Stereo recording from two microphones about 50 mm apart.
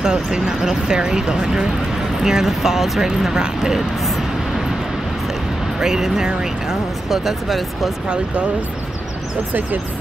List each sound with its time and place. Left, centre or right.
0.0 s speech: centre
5.8 s speech: centre